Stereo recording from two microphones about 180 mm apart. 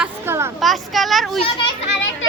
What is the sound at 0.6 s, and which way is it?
Child singing, centre (ahead or behind).